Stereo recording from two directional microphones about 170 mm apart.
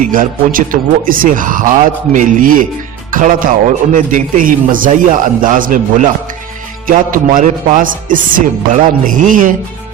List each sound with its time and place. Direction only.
0.0 s speech: 55° right (ahead or behind)